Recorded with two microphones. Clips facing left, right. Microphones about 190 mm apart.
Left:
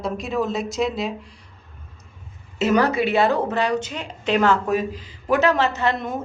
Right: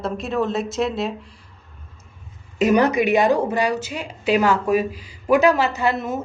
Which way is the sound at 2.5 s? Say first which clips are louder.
Right 2 dB; 15° right (ahead or behind).